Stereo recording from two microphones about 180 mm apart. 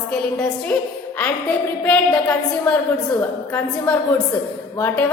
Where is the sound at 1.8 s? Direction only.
10° left (ahead or behind).